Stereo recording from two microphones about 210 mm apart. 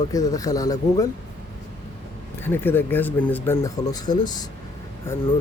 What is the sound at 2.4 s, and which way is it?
Speech, 10° left (ahead or behind).